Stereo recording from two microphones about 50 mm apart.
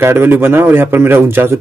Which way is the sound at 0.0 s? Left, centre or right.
Right.